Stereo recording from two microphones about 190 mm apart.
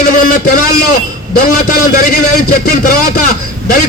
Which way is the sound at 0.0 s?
45° left (ahead or behind).